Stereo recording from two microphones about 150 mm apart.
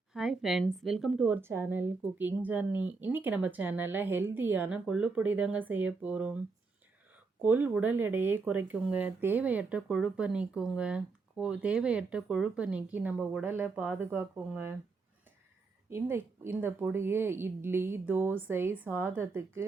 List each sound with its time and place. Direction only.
0.1 s a sound: 5° right (ahead or behind)
0.8 s speech: centre (ahead or behind)
7.4 s speech: 10° right (ahead or behind)
15.9 s speech: 15° right (ahead or behind)